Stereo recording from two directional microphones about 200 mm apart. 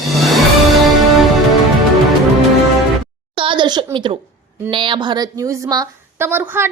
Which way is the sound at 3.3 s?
25° right (ahead or behind).